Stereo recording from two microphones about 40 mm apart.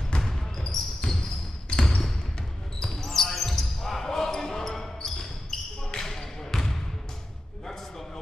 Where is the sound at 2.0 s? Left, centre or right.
Centre.